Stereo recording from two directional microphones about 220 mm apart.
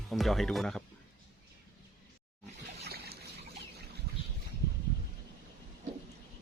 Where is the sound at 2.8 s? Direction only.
45° right (ahead or behind).